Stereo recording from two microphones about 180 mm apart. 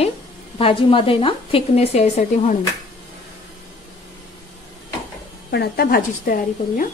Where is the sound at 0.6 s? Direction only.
30° left (ahead or behind).